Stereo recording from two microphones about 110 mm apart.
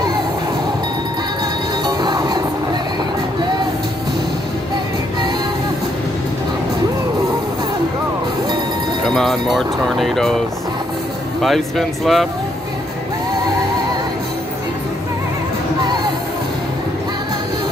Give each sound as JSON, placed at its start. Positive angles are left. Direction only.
{"t": 1.9, "sound": "music", "side_deg": -40}
{"t": 9.0, "sound": "speech", "side_deg": 0}
{"t": 11.4, "sound": "speech", "side_deg": 0}